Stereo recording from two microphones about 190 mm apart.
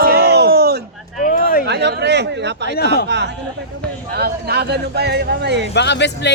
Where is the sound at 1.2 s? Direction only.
45° left (ahead or behind).